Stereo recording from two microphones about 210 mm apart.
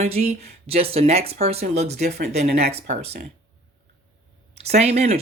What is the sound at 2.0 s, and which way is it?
Speech, 50° right (ahead or behind).